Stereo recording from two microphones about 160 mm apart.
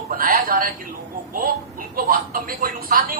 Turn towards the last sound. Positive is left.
turn(degrees=-60)  # may be behind; listen again after turning